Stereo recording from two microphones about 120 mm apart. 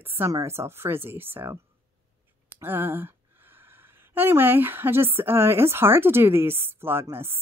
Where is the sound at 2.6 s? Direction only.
15° right (ahead or behind).